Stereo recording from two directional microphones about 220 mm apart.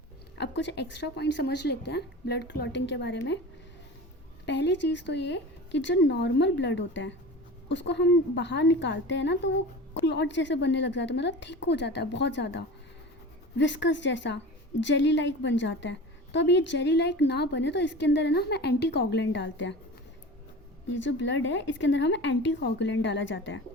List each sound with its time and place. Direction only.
0.3 s a woman's voice: 50° left (ahead or behind)
4.4 s a woman's voice: 50° left (ahead or behind)
20.9 s speech: 55° left (ahead or behind)